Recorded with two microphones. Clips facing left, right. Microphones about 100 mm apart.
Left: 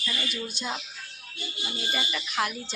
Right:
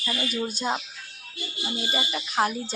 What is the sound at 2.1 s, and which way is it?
Speech, 35° right (ahead or behind).